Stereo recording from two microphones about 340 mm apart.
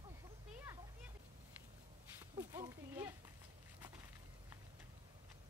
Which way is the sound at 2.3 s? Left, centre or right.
Centre.